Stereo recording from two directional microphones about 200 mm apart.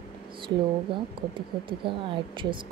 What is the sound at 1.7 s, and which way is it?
Speech, 25° right (ahead or behind).